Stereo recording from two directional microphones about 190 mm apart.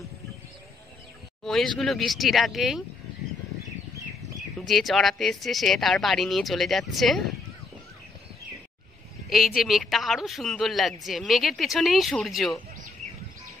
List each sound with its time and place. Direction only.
1.4 s speech: centre (ahead or behind)
4.6 s speech: centre (ahead or behind)
9.6 s speech: centre (ahead or behind)